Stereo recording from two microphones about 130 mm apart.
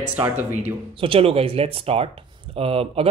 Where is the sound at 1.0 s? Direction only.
45° right (ahead or behind).